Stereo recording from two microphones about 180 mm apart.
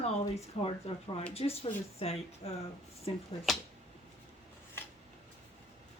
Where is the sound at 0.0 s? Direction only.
35° left (ahead or behind).